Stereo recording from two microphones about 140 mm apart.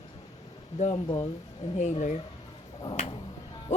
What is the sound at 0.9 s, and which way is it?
Speech, 35° left (ahead or behind).